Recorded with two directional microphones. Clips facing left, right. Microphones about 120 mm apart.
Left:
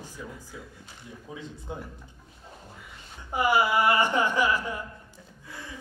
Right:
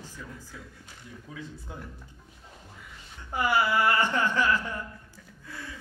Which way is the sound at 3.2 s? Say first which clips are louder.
Left 2 dB; 15° left (ahead or behind).